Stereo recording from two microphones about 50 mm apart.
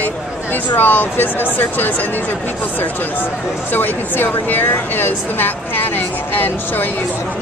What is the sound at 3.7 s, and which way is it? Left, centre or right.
Speech, left.